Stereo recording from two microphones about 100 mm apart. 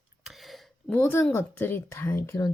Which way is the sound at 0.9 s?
25° left (ahead or behind).